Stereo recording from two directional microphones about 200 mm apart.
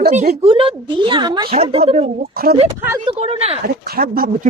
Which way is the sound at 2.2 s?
50° right (ahead or behind).